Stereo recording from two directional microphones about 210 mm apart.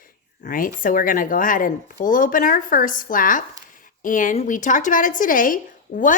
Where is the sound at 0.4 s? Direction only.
40° left (ahead or behind).